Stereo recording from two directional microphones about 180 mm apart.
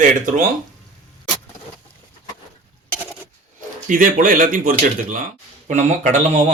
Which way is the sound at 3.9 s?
50° right (ahead or behind).